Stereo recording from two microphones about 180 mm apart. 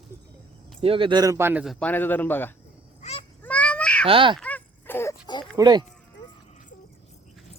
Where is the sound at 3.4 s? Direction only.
10° left (ahead or behind).